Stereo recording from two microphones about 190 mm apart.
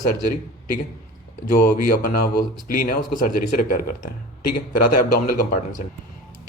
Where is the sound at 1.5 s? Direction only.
45° left (ahead or behind).